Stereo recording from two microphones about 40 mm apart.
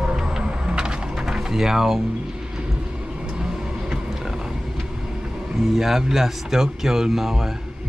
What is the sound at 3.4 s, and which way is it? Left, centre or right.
Music, centre.